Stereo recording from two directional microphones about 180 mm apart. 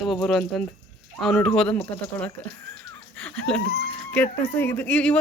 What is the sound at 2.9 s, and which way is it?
Wheeze, 5° left (ahead or behind).